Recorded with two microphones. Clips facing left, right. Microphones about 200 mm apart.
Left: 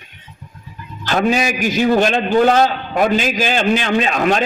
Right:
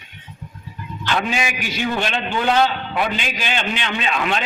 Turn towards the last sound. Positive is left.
turn(degrees=40)  # may be behind; listen again after turning